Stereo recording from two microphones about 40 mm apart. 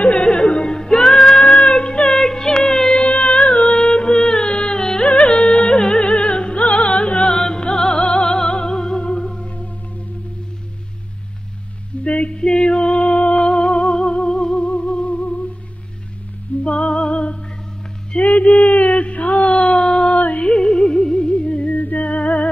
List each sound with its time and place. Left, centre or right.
0.0 s music: left
2.0 s music: centre
2.6 s a sound: centre
3.0 s a sound: left
3.6 s music: centre
7.2 s music: centre
12.0 s a sound: left
12.4 s music: left
16.6 s music: left
18.1 s a sound: left
20.1 s music: left
20.4 s music: centre
21.3 s music: left
21.7 s music: left